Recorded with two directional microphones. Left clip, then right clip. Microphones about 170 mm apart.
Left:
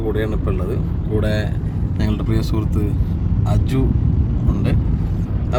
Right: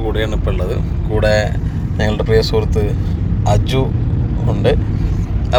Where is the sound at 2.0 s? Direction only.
15° left (ahead or behind).